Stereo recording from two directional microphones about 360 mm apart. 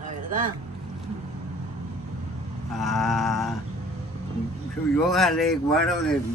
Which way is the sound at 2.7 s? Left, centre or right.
Centre.